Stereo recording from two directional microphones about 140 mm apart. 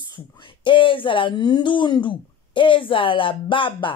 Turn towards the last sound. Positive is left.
turn(degrees=35)  # may be behind; listen again after turning